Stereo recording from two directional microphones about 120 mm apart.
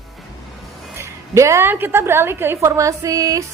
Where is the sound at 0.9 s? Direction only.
25° right (ahead or behind).